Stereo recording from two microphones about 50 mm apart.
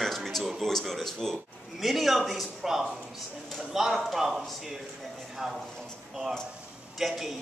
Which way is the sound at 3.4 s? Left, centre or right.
Centre.